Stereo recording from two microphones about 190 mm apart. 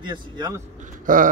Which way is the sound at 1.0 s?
45° right (ahead or behind).